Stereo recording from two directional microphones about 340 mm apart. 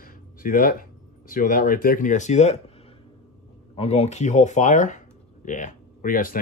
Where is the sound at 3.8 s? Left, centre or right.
Centre.